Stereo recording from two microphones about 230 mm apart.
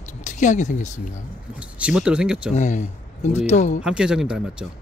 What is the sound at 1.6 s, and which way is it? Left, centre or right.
Speech, centre.